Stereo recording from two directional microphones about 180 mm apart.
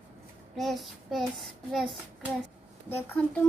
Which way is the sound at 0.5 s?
Centre (ahead or behind).